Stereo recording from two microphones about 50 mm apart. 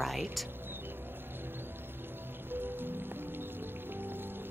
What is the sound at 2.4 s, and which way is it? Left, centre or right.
Music, right.